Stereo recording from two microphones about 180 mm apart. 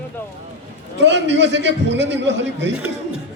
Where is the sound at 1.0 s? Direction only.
80° right.